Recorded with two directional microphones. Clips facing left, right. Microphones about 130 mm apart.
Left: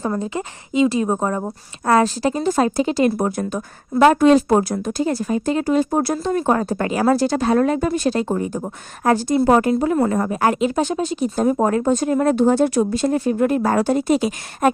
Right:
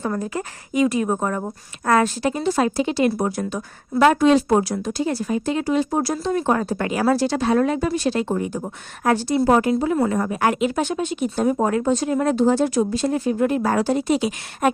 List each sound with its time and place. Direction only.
0.1 s a woman's voice: 20° left (ahead or behind); by 9.2 s 40° left (ahead or behind)
9.2 s a woman's voice: 50° left (ahead or behind)